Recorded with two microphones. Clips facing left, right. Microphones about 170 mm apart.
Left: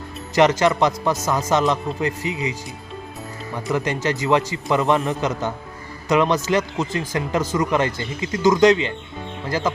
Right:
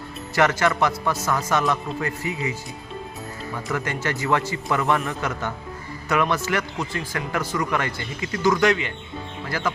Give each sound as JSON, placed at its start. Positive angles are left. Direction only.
{"t": 0.3, "sound": "speech", "side_deg": 20}
{"t": 3.7, "sound": "speech", "side_deg": 20}